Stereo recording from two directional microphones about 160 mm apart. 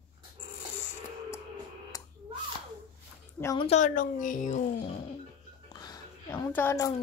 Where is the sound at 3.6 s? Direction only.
45° left (ahead or behind).